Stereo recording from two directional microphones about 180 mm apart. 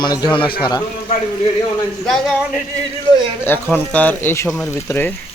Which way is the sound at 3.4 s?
10° left (ahead or behind).